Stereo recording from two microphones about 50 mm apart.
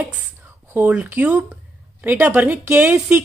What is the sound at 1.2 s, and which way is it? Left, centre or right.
A woman's voice, right.